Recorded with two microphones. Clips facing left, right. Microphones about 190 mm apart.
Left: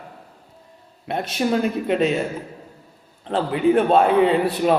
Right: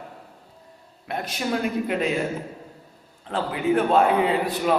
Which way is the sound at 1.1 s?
25° left (ahead or behind).